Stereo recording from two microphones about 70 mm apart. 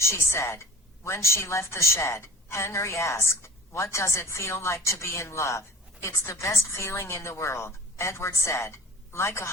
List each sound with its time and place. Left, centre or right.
0.0 s a woman's voice: left